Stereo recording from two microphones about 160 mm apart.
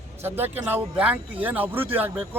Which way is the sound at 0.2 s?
15° right (ahead or behind).